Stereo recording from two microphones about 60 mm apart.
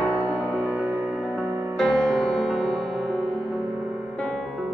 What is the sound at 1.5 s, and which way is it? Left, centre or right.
Music, right.